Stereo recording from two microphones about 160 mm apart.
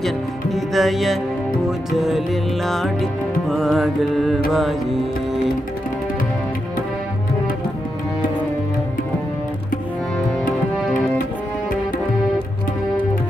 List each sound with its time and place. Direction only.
0.7 s music: centre (ahead or behind)